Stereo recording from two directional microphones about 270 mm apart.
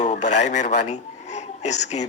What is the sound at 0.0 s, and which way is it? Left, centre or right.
A man's voice, left.